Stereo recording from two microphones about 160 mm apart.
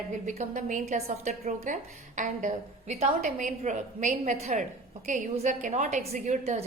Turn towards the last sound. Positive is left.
turn(degrees=-45)  # may be behind; listen again after turning